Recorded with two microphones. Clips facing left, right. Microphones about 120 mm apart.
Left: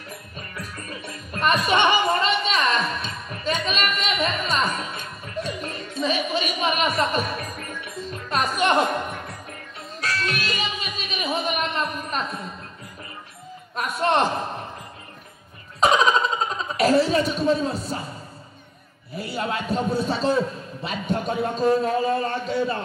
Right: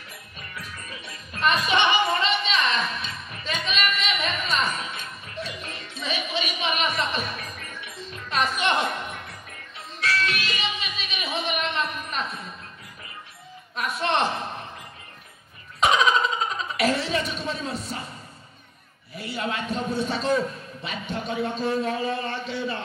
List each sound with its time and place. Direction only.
0.4 s music: 45° left (ahead or behind)
13.7 s a man's voice: 45° left (ahead or behind)
15.8 s a sound: 35° left (ahead or behind)
19.1 s a man's voice: 35° left (ahead or behind)